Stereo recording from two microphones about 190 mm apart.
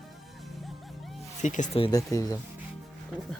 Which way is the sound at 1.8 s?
20° left (ahead or behind).